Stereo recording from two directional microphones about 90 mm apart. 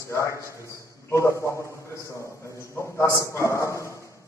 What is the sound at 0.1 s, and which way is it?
A man's voice, 35° left (ahead or behind).